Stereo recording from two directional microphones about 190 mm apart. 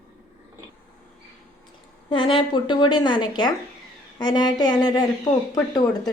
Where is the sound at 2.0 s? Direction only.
25° left (ahead or behind).